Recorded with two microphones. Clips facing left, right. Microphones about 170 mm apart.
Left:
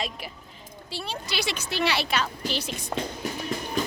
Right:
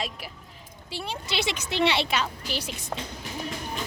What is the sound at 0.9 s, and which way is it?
A woman's voice, 20° right (ahead or behind).